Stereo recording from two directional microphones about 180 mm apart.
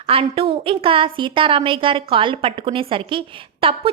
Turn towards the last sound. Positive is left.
turn(degrees=-30)  # may be behind; listen again after turning